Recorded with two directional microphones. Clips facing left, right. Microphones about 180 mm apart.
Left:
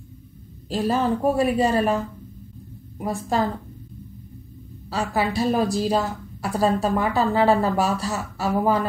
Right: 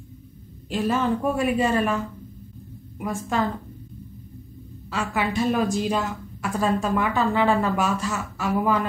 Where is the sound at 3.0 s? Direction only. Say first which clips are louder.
Left 2 dB; 35° left (ahead or behind).